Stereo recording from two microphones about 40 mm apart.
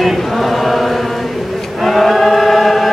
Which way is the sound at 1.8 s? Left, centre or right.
Centre.